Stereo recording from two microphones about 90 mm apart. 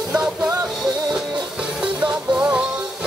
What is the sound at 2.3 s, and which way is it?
Music, 10° right (ahead or behind).